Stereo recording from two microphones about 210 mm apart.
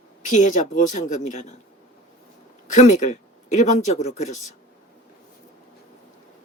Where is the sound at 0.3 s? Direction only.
35° left (ahead or behind).